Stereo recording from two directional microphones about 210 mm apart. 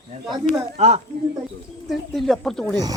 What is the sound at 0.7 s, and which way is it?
Speech, 30° right (ahead or behind).